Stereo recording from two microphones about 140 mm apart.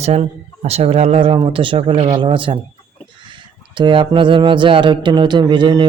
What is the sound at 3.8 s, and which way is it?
A man's voice, 35° right (ahead or behind).